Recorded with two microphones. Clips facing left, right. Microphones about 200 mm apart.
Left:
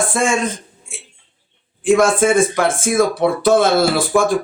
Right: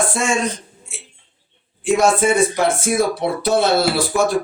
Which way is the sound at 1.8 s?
50° left (ahead or behind).